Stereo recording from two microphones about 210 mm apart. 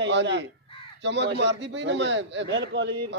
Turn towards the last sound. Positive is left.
turn(degrees=-55)  # may be behind; listen again after turning